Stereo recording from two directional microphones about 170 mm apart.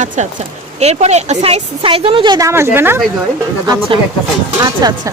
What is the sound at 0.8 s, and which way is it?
Speech, 40° right (ahead or behind).